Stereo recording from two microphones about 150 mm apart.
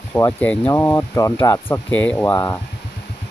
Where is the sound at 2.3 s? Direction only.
25° left (ahead or behind).